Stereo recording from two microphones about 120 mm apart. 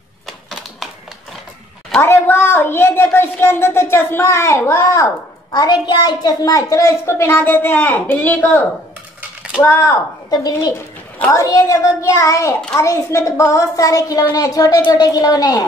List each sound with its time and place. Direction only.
2.0 s speech: 20° left (ahead or behind)
5.5 s a woman's voice: 35° left (ahead or behind)